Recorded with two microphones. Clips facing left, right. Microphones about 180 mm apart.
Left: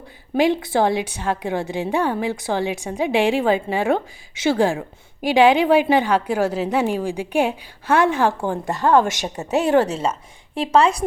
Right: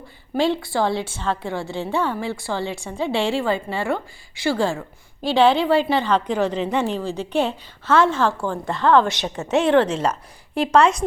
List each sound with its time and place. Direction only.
0.3 s a woman's voice: 15° left (ahead or behind)
8.6 s a woman's voice: 40° left (ahead or behind)
10.5 s a woman's voice: centre (ahead or behind)